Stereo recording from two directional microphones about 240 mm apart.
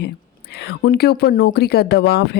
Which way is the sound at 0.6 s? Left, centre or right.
Left.